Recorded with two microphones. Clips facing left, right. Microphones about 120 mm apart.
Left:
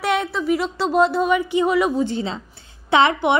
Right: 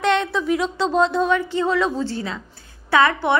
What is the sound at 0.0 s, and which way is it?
A woman's voice, 5° left (ahead or behind).